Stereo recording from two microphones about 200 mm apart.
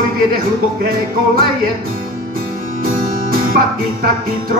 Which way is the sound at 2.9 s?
45° right (ahead or behind).